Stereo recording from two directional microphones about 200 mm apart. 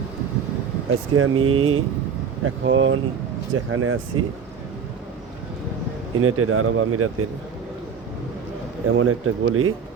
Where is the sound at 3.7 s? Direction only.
90° right.